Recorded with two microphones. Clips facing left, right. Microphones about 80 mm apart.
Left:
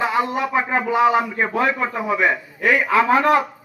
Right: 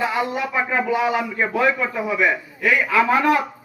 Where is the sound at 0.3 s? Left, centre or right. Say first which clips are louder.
Left 2 dB; left.